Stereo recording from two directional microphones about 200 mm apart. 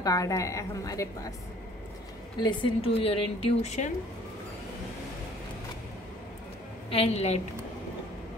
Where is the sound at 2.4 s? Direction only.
25° left (ahead or behind).